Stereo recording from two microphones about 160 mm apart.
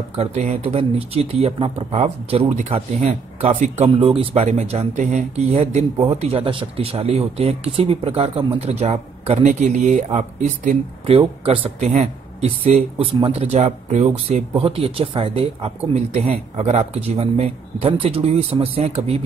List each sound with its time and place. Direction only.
0.2 s a man's voice: 45° right (ahead or behind)